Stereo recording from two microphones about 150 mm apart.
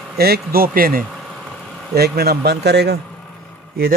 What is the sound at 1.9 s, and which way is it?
Speech, 90° right.